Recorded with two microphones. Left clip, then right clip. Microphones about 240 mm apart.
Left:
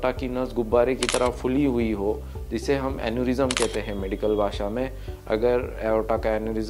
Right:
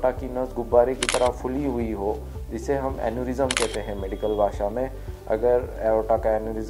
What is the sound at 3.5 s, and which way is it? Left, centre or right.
Speech, centre.